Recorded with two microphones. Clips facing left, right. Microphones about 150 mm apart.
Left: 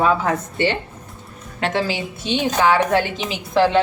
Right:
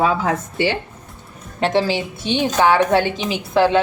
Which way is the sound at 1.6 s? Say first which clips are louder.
Right 4 dB; 25° right (ahead or behind).